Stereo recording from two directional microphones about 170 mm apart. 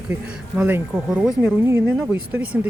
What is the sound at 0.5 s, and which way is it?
Speech, 10° right (ahead or behind).